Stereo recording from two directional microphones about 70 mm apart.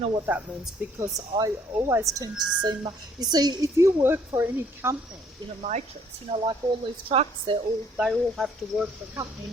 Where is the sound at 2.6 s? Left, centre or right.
Right.